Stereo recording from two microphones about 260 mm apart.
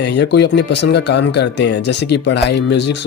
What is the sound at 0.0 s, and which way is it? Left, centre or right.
Speech, left.